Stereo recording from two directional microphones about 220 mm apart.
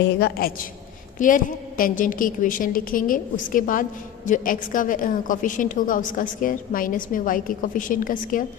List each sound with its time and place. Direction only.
0.0 s a woman's voice: 45° left (ahead or behind)